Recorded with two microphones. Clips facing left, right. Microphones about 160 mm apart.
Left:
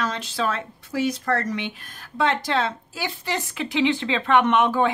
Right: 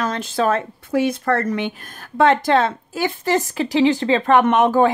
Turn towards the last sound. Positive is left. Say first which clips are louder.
# right 4 dB
turn(degrees=-45)  # may be behind; listen again after turning